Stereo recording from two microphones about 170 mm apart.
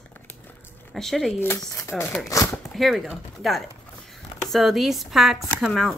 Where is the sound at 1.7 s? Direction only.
15° left (ahead or behind).